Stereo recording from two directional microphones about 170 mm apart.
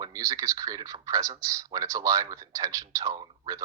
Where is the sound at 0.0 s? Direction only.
20° right (ahead or behind).